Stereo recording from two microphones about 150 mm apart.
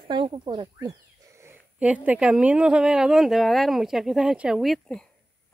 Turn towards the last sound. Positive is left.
turn(degrees=0)  # may be behind; listen again after turning